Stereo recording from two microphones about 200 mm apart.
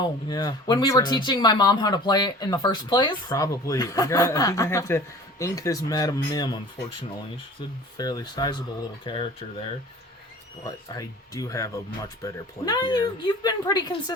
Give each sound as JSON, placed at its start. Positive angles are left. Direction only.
{"t": 0.0, "sound": "speech", "side_deg": 20}
{"t": 7.9, "sound": "speech", "side_deg": 20}
{"t": 10.6, "sound": "speech", "side_deg": 15}